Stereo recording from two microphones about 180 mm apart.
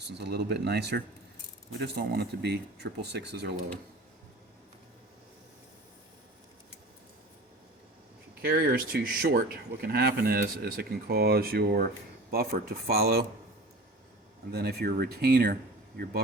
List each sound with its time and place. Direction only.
0.2 s speech: 65° right (ahead or behind)
8.4 s speech: 55° right (ahead or behind)
14.5 s speech: 60° right (ahead or behind)